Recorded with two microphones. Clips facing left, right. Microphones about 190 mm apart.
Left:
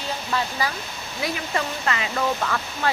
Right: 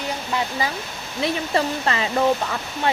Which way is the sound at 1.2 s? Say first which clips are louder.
Right 5 dB; 30° right (ahead or behind).